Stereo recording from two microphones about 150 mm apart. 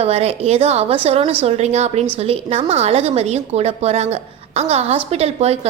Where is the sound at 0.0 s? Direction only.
45° right (ahead or behind).